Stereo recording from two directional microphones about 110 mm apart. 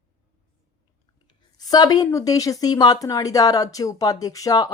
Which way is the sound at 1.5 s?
35° left (ahead or behind).